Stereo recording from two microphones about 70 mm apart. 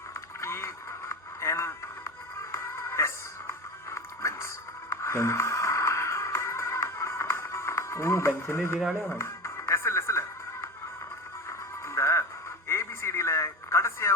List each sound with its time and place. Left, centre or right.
0.4 s music: left
8.3 s speech: left
9.0 s music: left
12.6 s radio: left